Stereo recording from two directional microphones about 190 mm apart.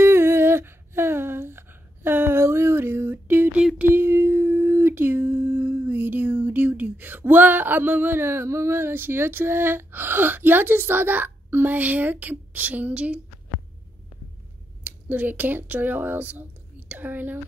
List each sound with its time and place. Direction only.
0.0 s humming: 10° right (ahead or behind)
14.8 s a woman's voice: 10° right (ahead or behind)